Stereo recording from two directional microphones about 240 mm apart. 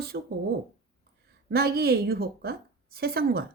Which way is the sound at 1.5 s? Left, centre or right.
Right.